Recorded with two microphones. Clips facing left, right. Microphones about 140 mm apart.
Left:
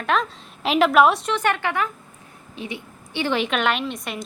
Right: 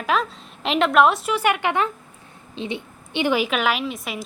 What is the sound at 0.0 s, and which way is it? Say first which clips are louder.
A woman's voice: even; centre (ahead or behind).